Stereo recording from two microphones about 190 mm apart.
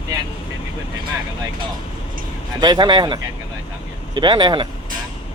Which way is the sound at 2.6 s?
25° right (ahead or behind).